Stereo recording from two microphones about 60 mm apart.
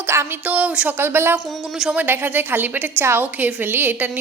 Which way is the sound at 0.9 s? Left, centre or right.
Right.